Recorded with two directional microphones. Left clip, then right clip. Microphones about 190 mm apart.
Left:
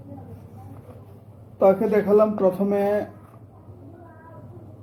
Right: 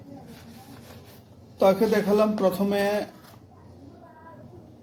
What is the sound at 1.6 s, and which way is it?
Speech, 15° right (ahead or behind).